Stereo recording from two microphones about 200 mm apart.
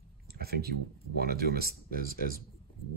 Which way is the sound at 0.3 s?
50° right (ahead or behind).